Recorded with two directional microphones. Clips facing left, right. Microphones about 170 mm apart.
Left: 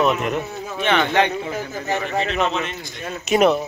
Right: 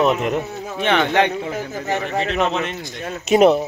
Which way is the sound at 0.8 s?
60° right (ahead or behind).